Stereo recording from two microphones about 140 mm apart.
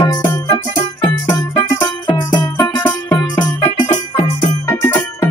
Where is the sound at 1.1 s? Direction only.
30° left (ahead or behind).